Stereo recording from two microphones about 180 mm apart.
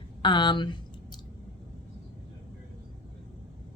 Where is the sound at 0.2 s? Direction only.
25° left (ahead or behind).